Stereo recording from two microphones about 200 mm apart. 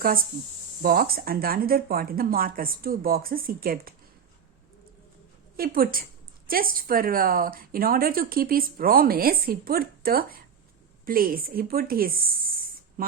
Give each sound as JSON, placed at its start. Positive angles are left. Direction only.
{"t": 0.8, "sound": "a woman's voice", "side_deg": -50}
{"t": 5.5, "sound": "a woman's voice", "side_deg": -45}